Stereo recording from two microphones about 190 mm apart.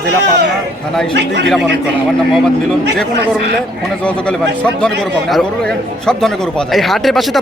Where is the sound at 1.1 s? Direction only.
65° right (ahead or behind).